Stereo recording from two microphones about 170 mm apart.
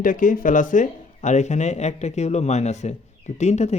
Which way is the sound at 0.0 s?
50° left (ahead or behind).